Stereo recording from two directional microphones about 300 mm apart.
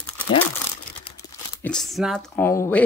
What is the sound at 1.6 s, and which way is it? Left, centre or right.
Speech, centre.